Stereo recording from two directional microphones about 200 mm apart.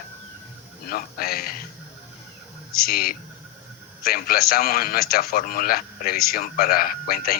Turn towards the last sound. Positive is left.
turn(degrees=50)  # may be behind; listen again after turning